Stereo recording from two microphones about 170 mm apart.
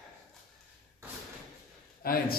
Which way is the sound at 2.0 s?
60° left (ahead or behind).